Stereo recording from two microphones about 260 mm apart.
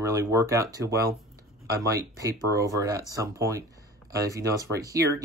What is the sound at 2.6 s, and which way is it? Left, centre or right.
Speech, centre.